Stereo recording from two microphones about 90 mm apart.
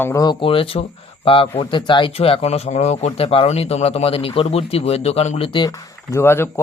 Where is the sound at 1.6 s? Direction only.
65° left (ahead or behind); by 5.6 s 90° left.